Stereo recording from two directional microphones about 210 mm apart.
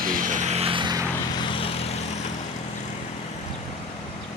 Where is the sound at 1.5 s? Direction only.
25° left (ahead or behind).